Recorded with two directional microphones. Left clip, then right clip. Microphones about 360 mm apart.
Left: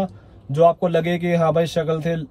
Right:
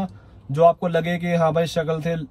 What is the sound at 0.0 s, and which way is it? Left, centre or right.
A man's voice, centre.